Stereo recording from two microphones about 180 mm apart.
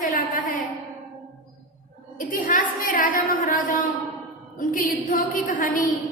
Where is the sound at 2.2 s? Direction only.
50° left (ahead or behind).